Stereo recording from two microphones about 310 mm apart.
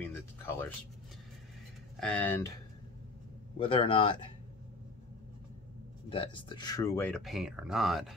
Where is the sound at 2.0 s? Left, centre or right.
Centre.